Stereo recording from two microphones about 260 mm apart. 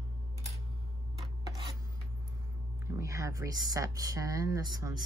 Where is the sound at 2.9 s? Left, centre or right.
Centre.